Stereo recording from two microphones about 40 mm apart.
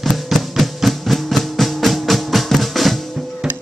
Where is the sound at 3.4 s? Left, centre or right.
Centre.